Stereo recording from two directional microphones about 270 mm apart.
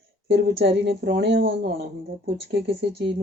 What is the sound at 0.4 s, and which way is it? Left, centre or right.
Speech, right.